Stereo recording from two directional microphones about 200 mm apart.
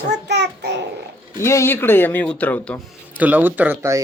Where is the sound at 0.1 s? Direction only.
60° right (ahead or behind).